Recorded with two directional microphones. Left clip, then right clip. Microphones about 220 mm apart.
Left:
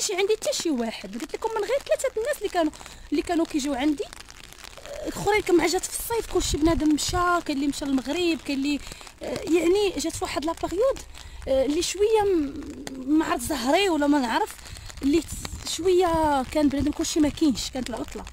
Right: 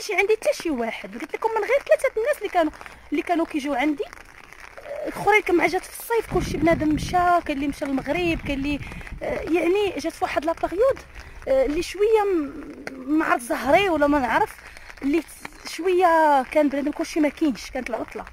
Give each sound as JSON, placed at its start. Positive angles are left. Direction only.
{"t": 0.0, "sound": "speech", "side_deg": 15}
{"t": 5.1, "sound": "speech", "side_deg": 15}
{"t": 15.7, "sound": "speech", "side_deg": 15}